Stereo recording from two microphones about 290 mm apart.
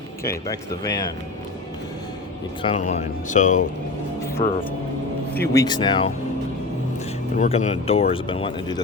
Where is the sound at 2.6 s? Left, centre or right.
Centre.